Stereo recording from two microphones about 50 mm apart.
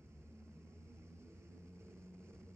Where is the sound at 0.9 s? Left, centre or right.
Right.